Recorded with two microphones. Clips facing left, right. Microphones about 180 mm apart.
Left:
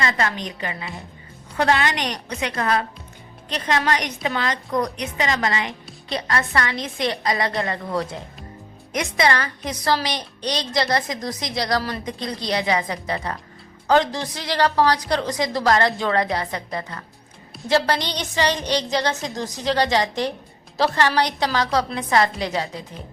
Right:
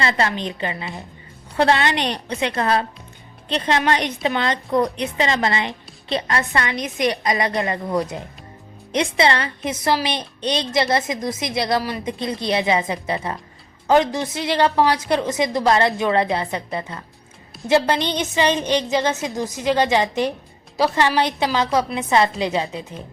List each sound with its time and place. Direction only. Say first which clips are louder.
0.0 s a woman's voice: right 2 dB; 25° right (ahead or behind)
8.9 s a woman's voice: right 2 dB; 25° right (ahead or behind)
11.8 s a woman's voice: right 2 dB; 10° right (ahead or behind)
12.0 s a woman's voice: right 4 dB; 25° right (ahead or behind)